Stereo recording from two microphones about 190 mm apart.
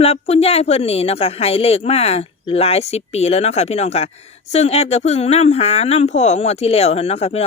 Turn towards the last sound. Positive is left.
turn(degrees=35)  # may be behind; listen again after turning